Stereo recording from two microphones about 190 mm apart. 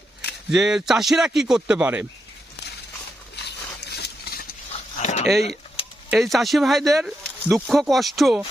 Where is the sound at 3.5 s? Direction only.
60° left (ahead or behind).